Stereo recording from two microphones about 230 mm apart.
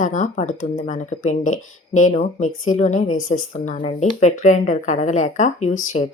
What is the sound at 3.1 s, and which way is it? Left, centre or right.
Speech, left.